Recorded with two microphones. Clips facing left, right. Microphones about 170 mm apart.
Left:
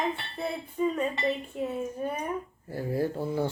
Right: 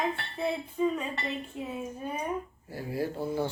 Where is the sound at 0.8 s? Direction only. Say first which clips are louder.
Left 1 dB; 5° left (ahead or behind).